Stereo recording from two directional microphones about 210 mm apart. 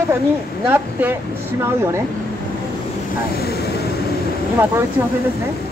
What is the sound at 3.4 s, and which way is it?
Speech, 50° left (ahead or behind).